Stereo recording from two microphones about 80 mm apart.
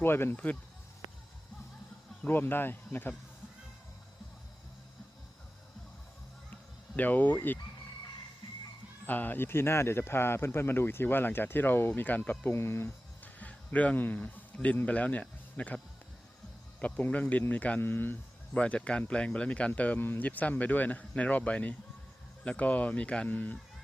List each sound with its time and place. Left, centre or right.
0.0 s speech: left
2.2 s speech: left
6.5 s sheep: left
9.0 s speech: left
12.5 s speech: left
16.8 s speech: centre
18.5 s speech: centre